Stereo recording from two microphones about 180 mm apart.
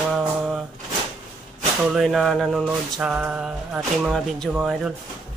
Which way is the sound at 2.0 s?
Centre (ahead or behind).